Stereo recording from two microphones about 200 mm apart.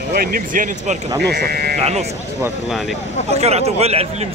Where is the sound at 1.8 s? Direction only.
30° right (ahead or behind).